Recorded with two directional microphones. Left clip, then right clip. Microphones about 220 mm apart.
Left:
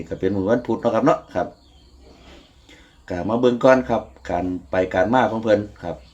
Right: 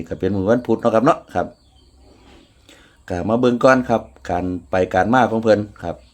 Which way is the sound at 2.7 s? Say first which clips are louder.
Right 3 dB; 50° right (ahead or behind).